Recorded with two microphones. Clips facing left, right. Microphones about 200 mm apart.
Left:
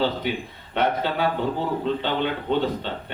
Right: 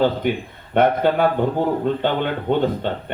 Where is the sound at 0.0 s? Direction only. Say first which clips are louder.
Right 5 dB; 50° right (ahead or behind).